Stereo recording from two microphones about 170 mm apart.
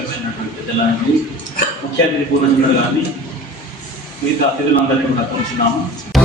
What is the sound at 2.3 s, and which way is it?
Speech, 60° left (ahead or behind).